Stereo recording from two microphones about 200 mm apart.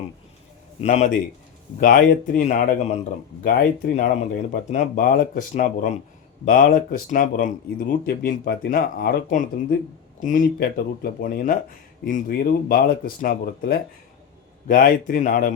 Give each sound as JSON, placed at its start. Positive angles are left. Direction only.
{"t": 0.8, "sound": "speech", "side_deg": 35}